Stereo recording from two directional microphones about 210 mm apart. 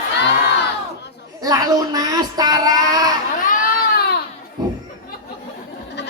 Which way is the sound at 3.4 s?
45° left (ahead or behind).